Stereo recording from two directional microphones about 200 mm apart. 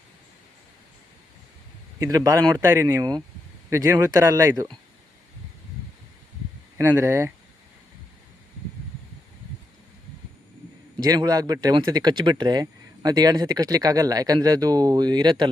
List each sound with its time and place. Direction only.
2.0 s speech: 15° right (ahead or behind)
6.7 s speech: 15° right (ahead or behind)
11.0 s speech: 20° right (ahead or behind)